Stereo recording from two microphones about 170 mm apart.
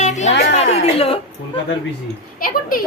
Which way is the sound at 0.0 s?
45° left (ahead or behind).